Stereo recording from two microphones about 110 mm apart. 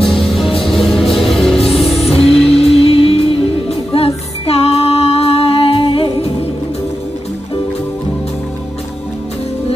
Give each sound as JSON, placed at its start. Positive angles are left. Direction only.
{"t": 0.0, "sound": "music", "side_deg": 5}
{"t": 2.6, "sound": "music", "side_deg": 65}